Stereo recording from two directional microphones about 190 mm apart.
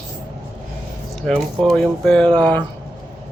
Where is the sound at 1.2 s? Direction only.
5° left (ahead or behind).